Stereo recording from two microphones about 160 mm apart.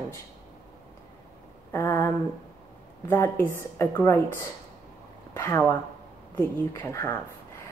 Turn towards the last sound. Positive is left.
turn(degrees=15)  # may be behind; listen again after turning